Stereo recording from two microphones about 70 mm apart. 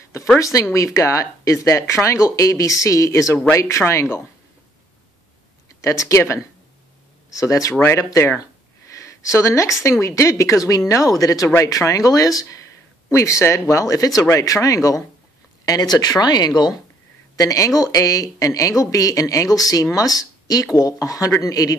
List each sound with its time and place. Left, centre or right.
0.4 s speech: left
5.8 s speech: left
8.9 s a sound: left
9.8 s speech: left
13.1 s speech: left
17.4 s speech: left